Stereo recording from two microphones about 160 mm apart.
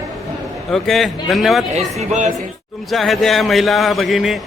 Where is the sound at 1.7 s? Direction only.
45° right (ahead or behind).